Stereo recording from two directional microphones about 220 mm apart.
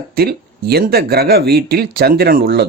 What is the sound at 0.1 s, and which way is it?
Speech, 45° right (ahead or behind).